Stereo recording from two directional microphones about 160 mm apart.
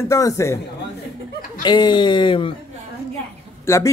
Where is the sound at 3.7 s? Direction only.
15° left (ahead or behind).